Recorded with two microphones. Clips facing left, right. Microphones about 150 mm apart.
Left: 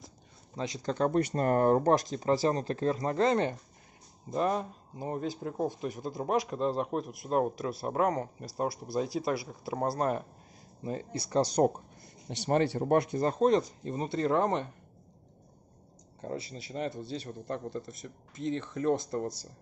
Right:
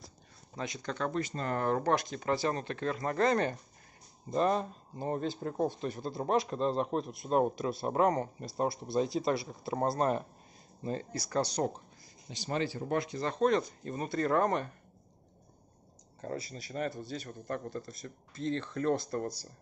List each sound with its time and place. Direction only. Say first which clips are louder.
0.6 s speech: left 5 dB; 30° left (ahead or behind)
1.1 s speech: left 7 dB; 55° left (ahead or behind); by 3.2 s 30° left (ahead or behind)
3.2 s speech: even; 20° left (ahead or behind)
4.3 s speech: right 1 dB; 10° left (ahead or behind)
11.1 s speech: left 5 dB; 30° left (ahead or behind)
11.4 s speech: left 7 dB; 50° left (ahead or behind); by 14.7 s 20° left (ahead or behind)
16.5 s speech: left 1 dB; 25° left (ahead or behind)